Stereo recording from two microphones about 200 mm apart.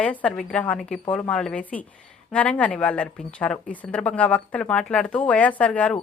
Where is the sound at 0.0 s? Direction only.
5° left (ahead or behind).